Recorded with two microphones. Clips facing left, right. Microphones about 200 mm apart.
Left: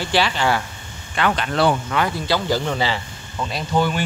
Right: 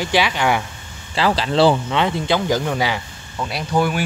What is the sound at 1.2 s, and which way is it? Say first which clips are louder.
Speech: right 3 dB; 30° right (ahead or behind).